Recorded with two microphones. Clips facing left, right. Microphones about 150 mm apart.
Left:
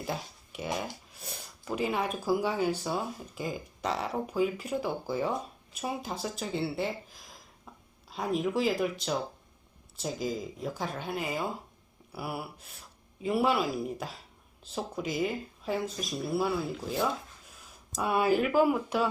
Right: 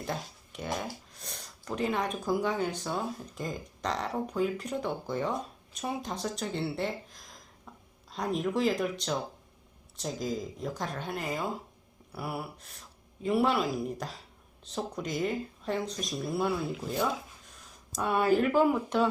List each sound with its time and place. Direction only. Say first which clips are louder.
0.0 s speech: even; 5° left (ahead or behind)